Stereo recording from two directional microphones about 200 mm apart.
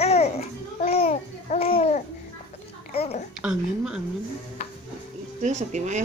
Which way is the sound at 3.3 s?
5° right (ahead or behind).